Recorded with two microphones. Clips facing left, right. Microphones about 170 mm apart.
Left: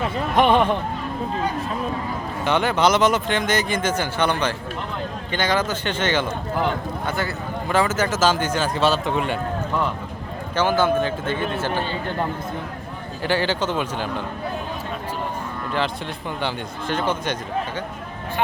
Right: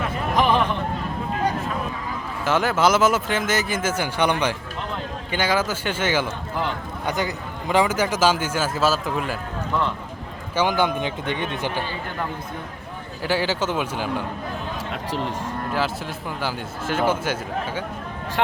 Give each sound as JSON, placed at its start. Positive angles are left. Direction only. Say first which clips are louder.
{"t": 0.3, "sound": "speech", "louder": "left 3 dB", "side_deg": 30}
{"t": 2.4, "sound": "a man's voice", "louder": "even", "side_deg": 0}
{"t": 10.5, "sound": "a man's voice", "louder": "left 2 dB", "side_deg": -15}
{"t": 13.2, "sound": "a man's voice", "louder": "left 1 dB", "side_deg": -10}
{"t": 16.4, "sound": "speech", "louder": "left 1 dB", "side_deg": -5}